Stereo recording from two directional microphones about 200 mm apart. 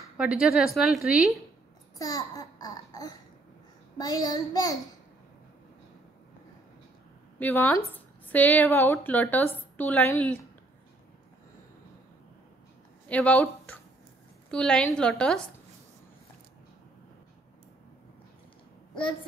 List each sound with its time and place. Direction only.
0.0 s a woman's voice: 5° right (ahead or behind)
2.0 s a child's voice: 15° left (ahead or behind)
7.3 s speech: 10° left (ahead or behind)
13.1 s a woman's voice: 5° left (ahead or behind)